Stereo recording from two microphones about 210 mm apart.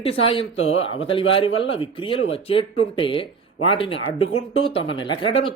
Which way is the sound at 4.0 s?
70° left (ahead or behind).